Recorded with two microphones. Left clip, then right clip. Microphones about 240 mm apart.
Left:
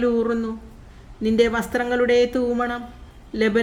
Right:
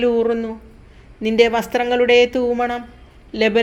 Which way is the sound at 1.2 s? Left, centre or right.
Left.